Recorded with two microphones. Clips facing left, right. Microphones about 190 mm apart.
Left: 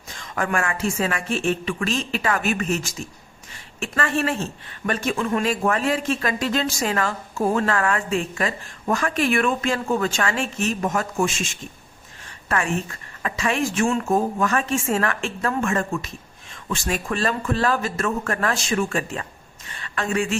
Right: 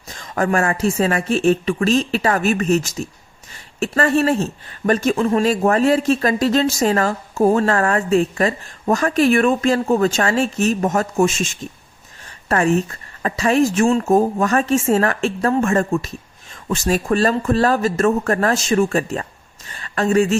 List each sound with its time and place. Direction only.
0.1 s speech: 40° right (ahead or behind)
12.5 s speech: 40° right (ahead or behind)